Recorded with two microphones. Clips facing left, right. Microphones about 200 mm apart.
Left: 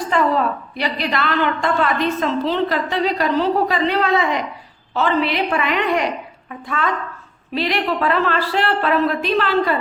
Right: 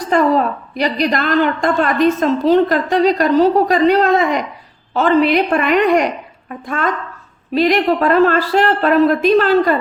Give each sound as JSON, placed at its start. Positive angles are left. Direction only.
{"t": 0.1, "sound": "a woman's voice", "side_deg": -40}